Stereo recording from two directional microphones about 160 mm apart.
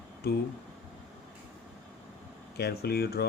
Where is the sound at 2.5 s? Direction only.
85° left.